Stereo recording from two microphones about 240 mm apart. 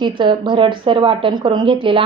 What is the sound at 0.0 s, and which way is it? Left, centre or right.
A woman's voice, centre.